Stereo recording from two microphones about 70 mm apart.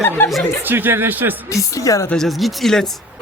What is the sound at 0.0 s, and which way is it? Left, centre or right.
Speech, left.